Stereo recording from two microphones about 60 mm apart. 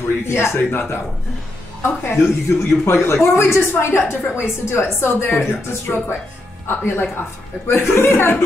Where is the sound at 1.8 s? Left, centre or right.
Left.